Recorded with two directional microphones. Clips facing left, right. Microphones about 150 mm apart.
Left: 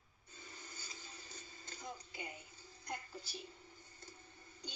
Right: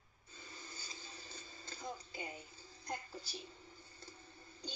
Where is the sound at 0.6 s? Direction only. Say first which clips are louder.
Right 2 dB; 30° right (ahead or behind).